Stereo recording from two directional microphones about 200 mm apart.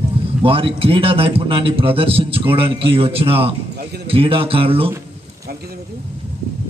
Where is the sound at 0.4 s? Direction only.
25° right (ahead or behind).